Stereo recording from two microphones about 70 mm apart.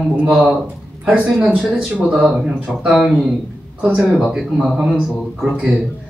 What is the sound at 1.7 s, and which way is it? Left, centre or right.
A man's voice, centre.